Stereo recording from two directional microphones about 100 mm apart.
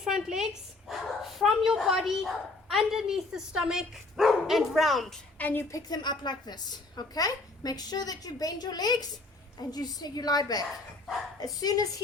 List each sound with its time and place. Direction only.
0.0 s a child's voice: 5° right (ahead or behind)
5.4 s a woman's voice: 20° left (ahead or behind)
5.7 s a woman's voice: 45° left (ahead or behind)